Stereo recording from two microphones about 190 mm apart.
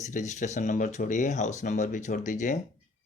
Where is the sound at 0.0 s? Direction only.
40° left (ahead or behind).